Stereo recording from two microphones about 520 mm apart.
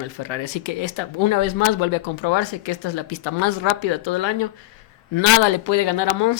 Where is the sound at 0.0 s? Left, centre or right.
Left.